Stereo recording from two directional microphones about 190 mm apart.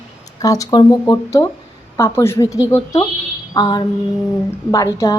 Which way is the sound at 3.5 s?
20° left (ahead or behind).